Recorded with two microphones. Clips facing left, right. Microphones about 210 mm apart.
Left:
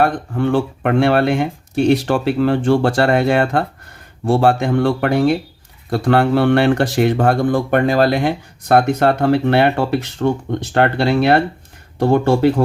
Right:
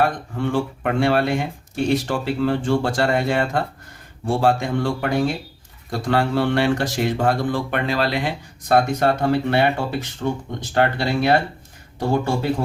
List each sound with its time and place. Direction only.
0.0 s speech: 60° left (ahead or behind)